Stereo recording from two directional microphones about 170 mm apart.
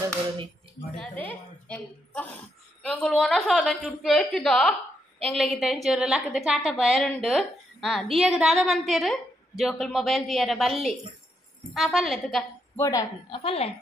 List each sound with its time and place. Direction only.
0.9 s a woman's voice: 5° left (ahead or behind)
11.7 s a woman's voice: centre (ahead or behind)
12.7 s a woman's voice: 15° left (ahead or behind)
13.3 s speech: 35° left (ahead or behind)